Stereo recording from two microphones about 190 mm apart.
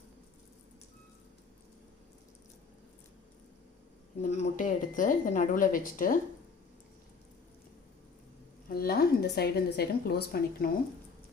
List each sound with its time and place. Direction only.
4.2 s speech: 35° left (ahead or behind)
8.7 s a woman's voice: 50° left (ahead or behind)